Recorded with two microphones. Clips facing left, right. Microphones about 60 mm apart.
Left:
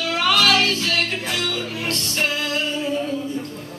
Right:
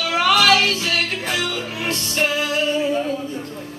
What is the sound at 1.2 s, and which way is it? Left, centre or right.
Speech, centre.